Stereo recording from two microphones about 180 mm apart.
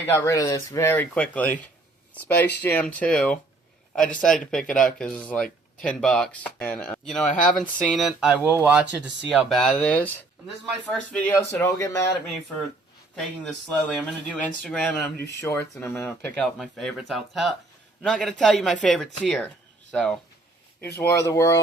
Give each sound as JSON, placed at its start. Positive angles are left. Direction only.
{"t": 0.0, "sound": "speech", "side_deg": 15}
{"t": 13.1, "sound": "speech", "side_deg": 0}